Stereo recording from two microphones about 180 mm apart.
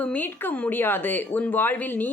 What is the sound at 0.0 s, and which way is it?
Speech, 10° left (ahead or behind).